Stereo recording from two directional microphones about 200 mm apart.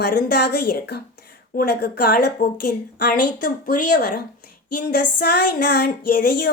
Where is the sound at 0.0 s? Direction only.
50° left (ahead or behind).